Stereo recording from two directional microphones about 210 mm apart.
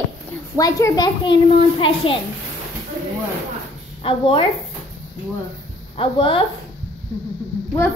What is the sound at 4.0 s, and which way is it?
Speech, 25° left (ahead or behind).